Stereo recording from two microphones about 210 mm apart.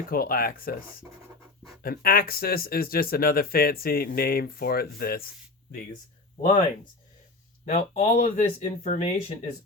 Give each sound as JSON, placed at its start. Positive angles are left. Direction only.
{"t": 0.1, "sound": "speech", "side_deg": 45}
{"t": 7.6, "sound": "speech", "side_deg": 35}